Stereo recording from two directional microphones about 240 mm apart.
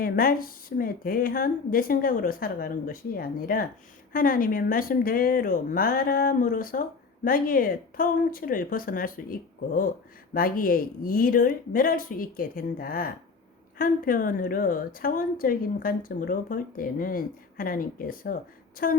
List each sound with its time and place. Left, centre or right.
0.0 s a woman's voice: left
10.3 s a woman's voice: left